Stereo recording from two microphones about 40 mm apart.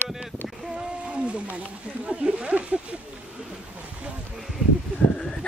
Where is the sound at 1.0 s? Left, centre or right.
Right.